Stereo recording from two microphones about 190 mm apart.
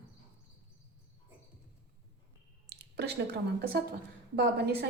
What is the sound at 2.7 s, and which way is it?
A woman's voice, 60° right (ahead or behind).